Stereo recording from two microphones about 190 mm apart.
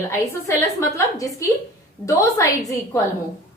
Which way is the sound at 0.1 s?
15° left (ahead or behind).